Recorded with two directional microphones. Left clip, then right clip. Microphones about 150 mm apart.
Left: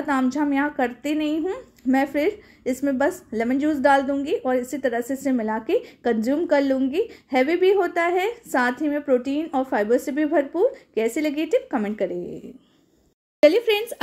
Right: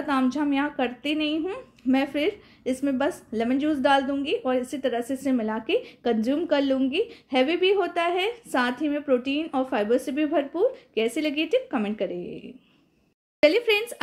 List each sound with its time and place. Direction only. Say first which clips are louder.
0.0 s a woman's voice: left 2 dB; 30° left (ahead or behind)
13.4 s a woman's voice: left 3 dB; 25° left (ahead or behind)